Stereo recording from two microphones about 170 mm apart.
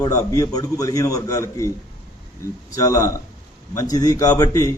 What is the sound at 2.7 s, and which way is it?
A man's voice, 20° left (ahead or behind).